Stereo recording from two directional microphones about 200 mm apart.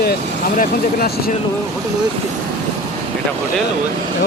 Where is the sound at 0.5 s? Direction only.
45° left (ahead or behind).